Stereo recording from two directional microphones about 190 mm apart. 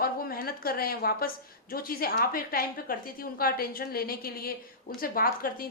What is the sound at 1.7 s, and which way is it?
A woman's voice, 50° left (ahead or behind).